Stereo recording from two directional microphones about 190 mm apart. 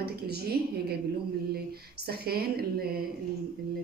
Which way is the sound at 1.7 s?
55° right (ahead or behind).